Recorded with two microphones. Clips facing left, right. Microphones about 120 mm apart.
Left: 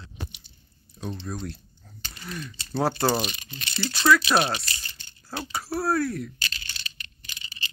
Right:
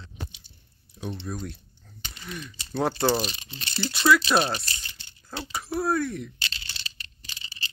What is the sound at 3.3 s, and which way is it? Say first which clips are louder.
Speech: left 1 dB; 25° right (ahead or behind).